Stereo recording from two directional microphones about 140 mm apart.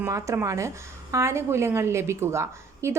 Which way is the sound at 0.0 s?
20° right (ahead or behind).